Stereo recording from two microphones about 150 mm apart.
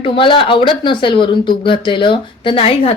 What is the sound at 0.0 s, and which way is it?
Speech, 35° left (ahead or behind).